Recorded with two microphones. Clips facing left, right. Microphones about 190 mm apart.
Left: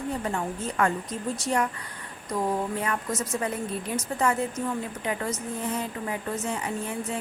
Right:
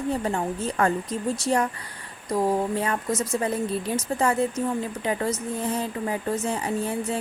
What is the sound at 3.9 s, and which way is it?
Speech, 30° right (ahead or behind).